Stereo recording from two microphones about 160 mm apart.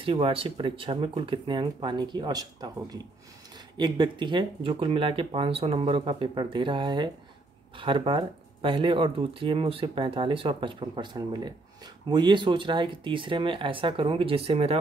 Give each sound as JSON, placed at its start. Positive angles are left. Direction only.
{"t": 0.0, "sound": "speech", "side_deg": -35}